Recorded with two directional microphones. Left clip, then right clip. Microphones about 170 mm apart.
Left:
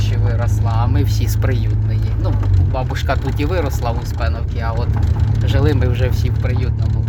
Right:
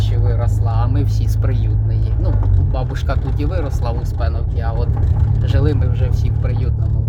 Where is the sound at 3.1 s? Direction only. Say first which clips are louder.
Left 6 dB; 10° left (ahead or behind).